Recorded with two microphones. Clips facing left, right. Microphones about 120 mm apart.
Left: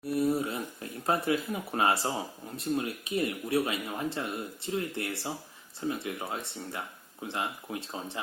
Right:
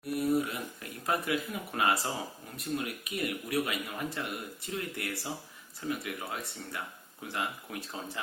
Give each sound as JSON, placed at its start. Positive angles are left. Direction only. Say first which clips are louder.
{"t": 0.1, "sound": "speech", "louder": "left 1 dB", "side_deg": 30}